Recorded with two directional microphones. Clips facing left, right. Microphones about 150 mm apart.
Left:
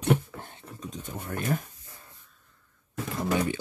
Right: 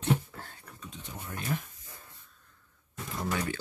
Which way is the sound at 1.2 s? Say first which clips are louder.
Left 5 dB; 55° left (ahead or behind).